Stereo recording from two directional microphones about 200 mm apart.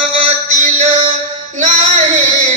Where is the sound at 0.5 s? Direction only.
35° right (ahead or behind).